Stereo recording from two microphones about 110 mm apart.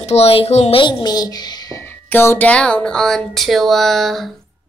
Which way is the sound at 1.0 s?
35° left (ahead or behind).